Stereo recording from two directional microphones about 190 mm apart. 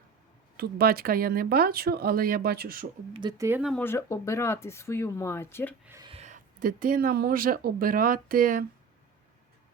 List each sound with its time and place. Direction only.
0.5 s speech: 55° right (ahead or behind)
3.1 s speech: 25° right (ahead or behind)
3.6 s speech: centre (ahead or behind)
3.8 s speech: 15° left (ahead or behind)
5.8 s speech: 15° right (ahead or behind)
6.1 s speech: 35° right (ahead or behind)